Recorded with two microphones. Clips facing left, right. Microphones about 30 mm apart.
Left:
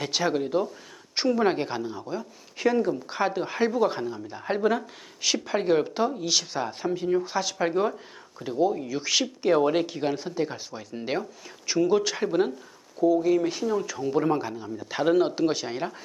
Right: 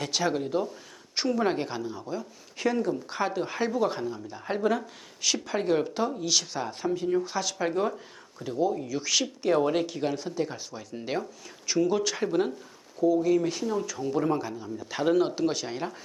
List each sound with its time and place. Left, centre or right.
0.0 s speech: centre